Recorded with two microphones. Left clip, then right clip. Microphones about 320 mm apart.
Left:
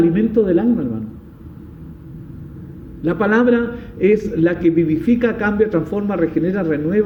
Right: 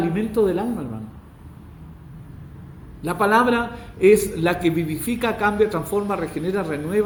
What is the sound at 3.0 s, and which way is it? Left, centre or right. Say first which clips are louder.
Speech: left 2 dB; centre.